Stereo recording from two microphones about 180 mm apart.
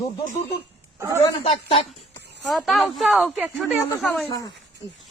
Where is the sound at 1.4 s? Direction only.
30° left (ahead or behind).